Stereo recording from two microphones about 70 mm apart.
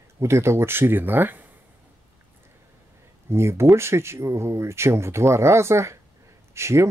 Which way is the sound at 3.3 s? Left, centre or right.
Right.